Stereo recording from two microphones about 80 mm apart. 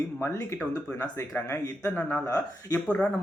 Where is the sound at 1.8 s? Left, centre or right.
Centre.